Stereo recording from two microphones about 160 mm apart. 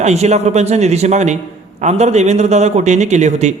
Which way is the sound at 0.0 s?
45° right (ahead or behind).